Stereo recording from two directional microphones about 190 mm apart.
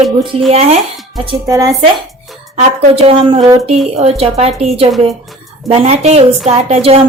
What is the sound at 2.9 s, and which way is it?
A woman's voice, 30° right (ahead or behind).